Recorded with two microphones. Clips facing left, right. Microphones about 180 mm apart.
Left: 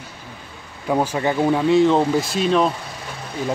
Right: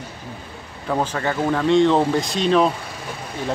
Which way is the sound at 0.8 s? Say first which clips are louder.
Left 3 dB; 10° left (ahead or behind).